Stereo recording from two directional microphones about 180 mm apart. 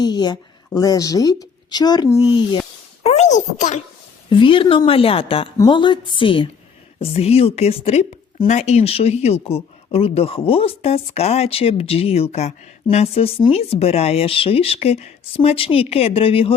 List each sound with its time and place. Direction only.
0.0 s a woman's voice: 25° left (ahead or behind)
3.0 s a sound: 35° left (ahead or behind)
4.3 s a woman's voice: 30° left (ahead or behind)